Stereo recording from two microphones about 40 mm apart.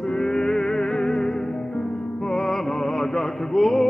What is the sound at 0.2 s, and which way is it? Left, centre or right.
Music, centre.